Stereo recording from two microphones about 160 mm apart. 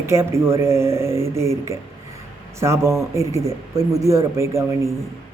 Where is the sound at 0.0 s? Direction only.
15° right (ahead or behind).